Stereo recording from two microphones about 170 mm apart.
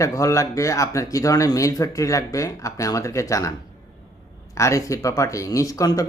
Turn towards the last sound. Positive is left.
turn(degrees=20)  # may be behind; listen again after turning